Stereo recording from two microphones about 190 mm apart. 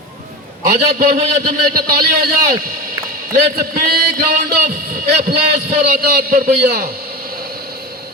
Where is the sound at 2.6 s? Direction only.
50° right (ahead or behind).